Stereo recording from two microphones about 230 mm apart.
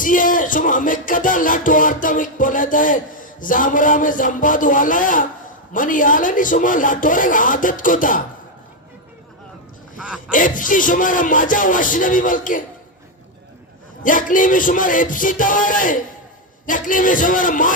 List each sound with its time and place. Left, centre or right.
0.0 s music: left
10.0 s a sound: centre
10.3 s music: left
14.0 s music: left